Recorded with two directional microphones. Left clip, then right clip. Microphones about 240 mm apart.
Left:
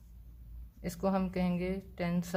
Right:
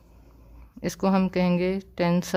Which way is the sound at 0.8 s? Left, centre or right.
Right.